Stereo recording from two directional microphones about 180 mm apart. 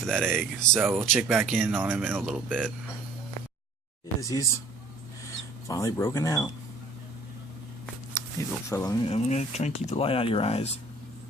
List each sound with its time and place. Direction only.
0.0 s speech: 5° left (ahead or behind)
4.2 s speech: 20° left (ahead or behind)
5.6 s speech: 15° left (ahead or behind)
8.1 s speech: 15° left (ahead or behind)
9.0 s speech: 35° left (ahead or behind)